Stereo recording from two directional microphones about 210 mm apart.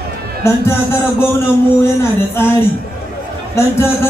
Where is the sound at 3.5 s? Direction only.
10° left (ahead or behind).